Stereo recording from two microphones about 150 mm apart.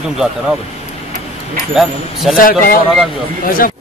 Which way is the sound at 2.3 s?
70° left (ahead or behind).